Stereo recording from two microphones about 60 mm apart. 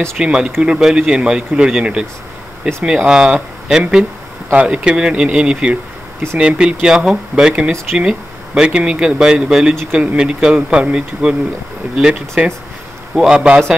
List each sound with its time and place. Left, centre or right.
0.2 s speech: centre